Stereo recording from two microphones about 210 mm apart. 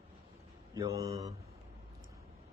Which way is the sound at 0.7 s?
15° right (ahead or behind).